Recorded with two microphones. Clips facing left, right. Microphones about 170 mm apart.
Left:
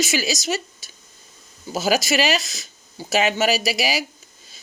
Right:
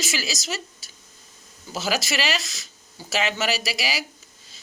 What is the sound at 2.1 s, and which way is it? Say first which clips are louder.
Speech: left 6 dB; 20° left (ahead or behind).